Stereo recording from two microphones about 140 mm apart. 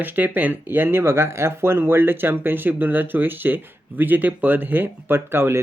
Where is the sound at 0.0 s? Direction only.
10° right (ahead or behind).